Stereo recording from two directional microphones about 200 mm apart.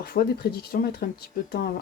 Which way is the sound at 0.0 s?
50° left (ahead or behind).